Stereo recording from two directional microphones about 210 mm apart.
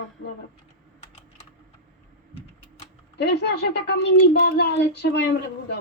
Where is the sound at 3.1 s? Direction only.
55° left (ahead or behind).